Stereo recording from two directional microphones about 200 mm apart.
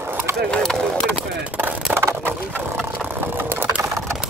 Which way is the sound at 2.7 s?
5° right (ahead or behind).